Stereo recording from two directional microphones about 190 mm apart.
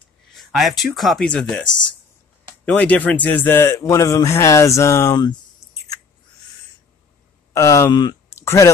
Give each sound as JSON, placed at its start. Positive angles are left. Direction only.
{"t": 0.3, "sound": "speech", "side_deg": 0}
{"t": 2.6, "sound": "speech", "side_deg": 5}
{"t": 7.5, "sound": "speech", "side_deg": 15}